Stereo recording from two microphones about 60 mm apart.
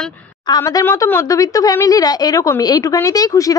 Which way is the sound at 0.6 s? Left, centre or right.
Left.